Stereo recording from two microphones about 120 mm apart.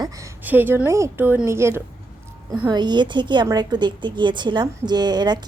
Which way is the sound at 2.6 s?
35° right (ahead or behind).